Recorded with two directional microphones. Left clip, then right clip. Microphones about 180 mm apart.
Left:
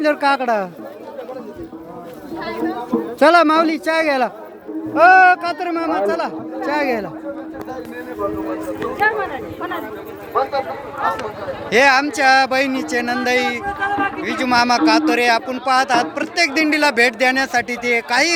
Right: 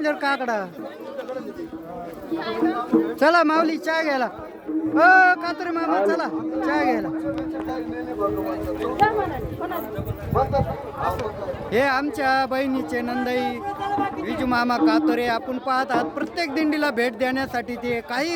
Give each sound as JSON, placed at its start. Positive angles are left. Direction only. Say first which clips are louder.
{"t": 0.0, "sound": "a man's voice", "louder": "left 7 dB", "side_deg": 15}
{"t": 3.2, "sound": "a man's voice", "louder": "left 7 dB", "side_deg": 10}
{"t": 9.0, "sound": "speech", "louder": "left 2 dB", "side_deg": -15}
{"t": 11.7, "sound": "a man's voice", "louder": "left 8 dB", "side_deg": 0}
{"t": 13.7, "sound": "speech", "louder": "left 5 dB", "side_deg": -15}
{"t": 14.3, "sound": "a man's voice", "louder": "left 8 dB", "side_deg": 0}